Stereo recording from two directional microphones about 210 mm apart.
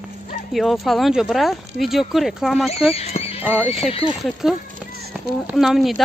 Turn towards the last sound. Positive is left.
turn(degrees=0)  # may be behind; listen again after turning